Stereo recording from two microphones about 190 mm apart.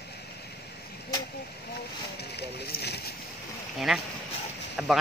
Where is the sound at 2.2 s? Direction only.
60° left (ahead or behind).